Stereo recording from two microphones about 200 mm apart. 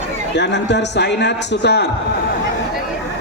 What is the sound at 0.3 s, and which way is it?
A man's voice, 60° left (ahead or behind).